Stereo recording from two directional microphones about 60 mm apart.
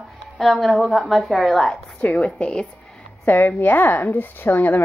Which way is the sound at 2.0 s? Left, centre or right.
Left.